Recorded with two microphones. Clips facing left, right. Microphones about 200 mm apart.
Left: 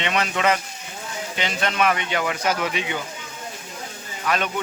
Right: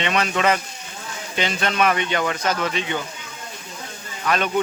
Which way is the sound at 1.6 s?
40° right (ahead or behind).